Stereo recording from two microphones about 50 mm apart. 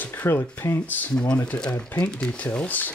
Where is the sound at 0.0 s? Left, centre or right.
Left.